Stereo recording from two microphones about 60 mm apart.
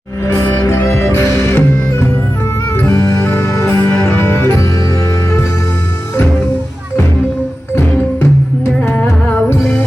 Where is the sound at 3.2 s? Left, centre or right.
Left.